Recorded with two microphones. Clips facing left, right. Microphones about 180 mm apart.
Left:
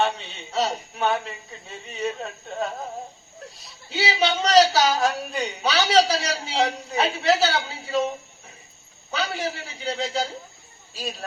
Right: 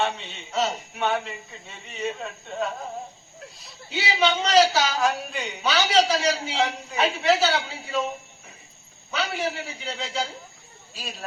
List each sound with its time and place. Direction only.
0.0 s a man's voice: 35° left (ahead or behind)
3.8 s a man's voice: 35° left (ahead or behind)
9.1 s a man's voice: 35° left (ahead or behind)